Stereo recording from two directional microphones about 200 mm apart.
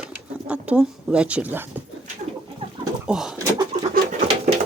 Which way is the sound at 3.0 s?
5° right (ahead or behind).